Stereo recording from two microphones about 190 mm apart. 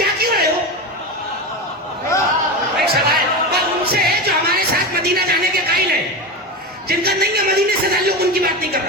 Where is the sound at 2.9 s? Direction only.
55° right (ahead or behind).